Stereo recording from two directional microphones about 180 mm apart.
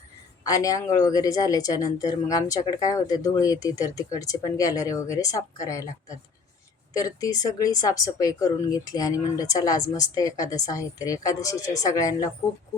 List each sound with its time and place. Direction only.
0.4 s a woman's voice: 20° left (ahead or behind)
6.9 s a woman's voice: 20° left (ahead or behind)